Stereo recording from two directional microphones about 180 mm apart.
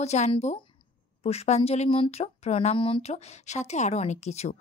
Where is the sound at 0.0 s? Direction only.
35° left (ahead or behind).